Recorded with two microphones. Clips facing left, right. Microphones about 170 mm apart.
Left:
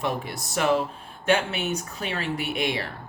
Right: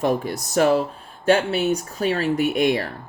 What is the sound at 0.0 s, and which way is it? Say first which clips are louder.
Speech: right 7 dB; 40° right (ahead or behind).